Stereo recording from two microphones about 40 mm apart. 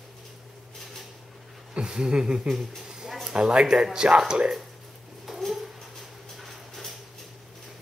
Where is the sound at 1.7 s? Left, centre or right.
Centre.